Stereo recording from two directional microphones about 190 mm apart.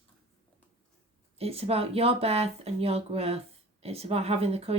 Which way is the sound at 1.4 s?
30° right (ahead or behind).